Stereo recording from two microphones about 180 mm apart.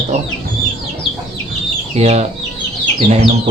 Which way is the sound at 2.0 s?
35° right (ahead or behind).